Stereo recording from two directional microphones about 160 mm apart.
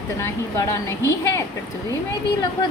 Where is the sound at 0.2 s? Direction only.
20° left (ahead or behind).